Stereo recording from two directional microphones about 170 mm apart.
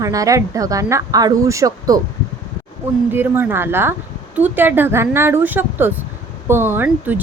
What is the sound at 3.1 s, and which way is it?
Speech, 10° right (ahead or behind).